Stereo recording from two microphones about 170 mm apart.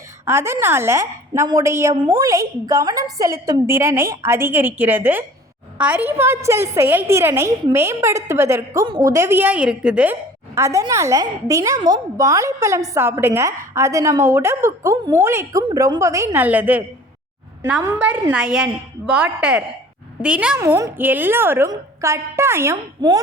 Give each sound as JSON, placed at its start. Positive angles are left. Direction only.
{"t": 0.3, "sound": "a woman's voice", "side_deg": -15}